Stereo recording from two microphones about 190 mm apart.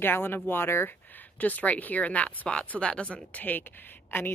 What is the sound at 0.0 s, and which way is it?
A woman's voice, 10° left (ahead or behind).